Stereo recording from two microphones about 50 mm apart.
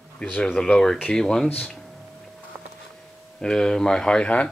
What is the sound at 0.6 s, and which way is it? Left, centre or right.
Speech, centre.